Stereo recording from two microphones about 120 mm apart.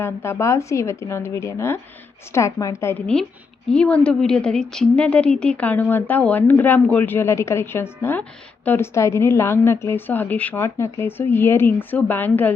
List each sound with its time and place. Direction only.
0.0 s a woman's voice: 20° left (ahead or behind)
3.7 s speech: 10° left (ahead or behind)